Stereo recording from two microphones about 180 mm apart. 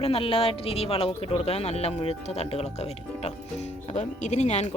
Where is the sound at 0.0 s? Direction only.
30° left (ahead or behind).